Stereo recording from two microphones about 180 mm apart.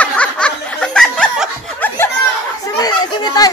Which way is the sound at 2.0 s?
15° left (ahead or behind).